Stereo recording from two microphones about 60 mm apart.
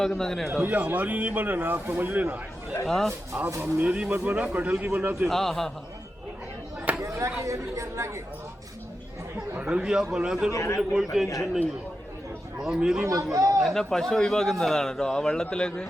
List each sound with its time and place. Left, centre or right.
0.0 s speech: centre
0.6 s a man's voice: right
2.8 s speech: centre
3.6 s speech: right
5.3 s speech: centre
6.9 s a sound: right
7.3 s speech: right
9.6 s a sound: centre
9.8 s a man's voice: centre
10.5 s speech: left
10.8 s a man's voice: centre
12.5 s a man's voice: centre
13.3 s a man's voice: right
13.6 s a man's voice: centre